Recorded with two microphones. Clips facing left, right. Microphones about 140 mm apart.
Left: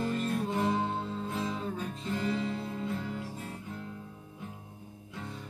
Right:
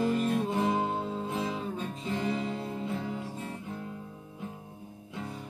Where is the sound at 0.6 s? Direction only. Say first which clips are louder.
Right 2 dB; 10° right (ahead or behind).